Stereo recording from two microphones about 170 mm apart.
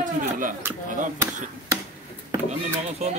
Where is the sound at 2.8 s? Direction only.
40° right (ahead or behind).